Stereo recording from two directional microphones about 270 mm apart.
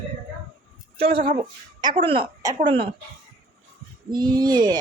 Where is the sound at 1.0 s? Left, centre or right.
Centre.